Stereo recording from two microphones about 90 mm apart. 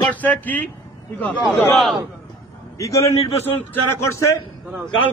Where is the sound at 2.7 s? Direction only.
35° left (ahead or behind).